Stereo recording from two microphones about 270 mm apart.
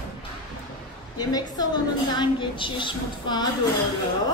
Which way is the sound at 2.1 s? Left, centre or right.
Centre.